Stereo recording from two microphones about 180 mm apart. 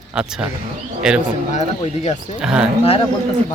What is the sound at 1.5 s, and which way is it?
Speech, 40° left (ahead or behind).